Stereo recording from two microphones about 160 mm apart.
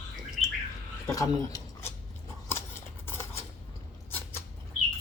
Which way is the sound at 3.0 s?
15° left (ahead or behind).